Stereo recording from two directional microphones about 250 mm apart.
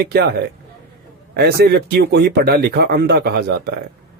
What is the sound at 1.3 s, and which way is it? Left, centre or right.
Speech, right.